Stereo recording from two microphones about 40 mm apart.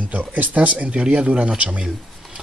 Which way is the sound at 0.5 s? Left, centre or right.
Right.